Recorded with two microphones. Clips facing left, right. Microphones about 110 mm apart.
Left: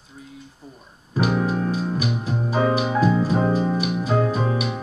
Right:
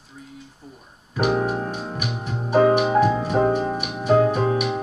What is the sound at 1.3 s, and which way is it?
Music, 40° right (ahead or behind).